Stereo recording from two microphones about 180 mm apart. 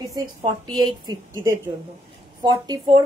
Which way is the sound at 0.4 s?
25° right (ahead or behind).